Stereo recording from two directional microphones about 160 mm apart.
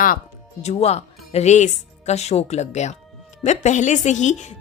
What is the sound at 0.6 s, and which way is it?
Speech, 40° left (ahead or behind).